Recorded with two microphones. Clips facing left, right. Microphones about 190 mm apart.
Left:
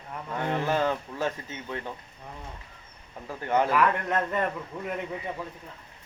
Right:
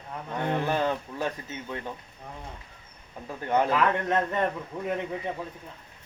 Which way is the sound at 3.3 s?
15° right (ahead or behind).